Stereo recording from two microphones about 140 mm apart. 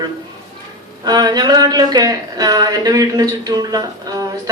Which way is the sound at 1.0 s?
30° right (ahead or behind).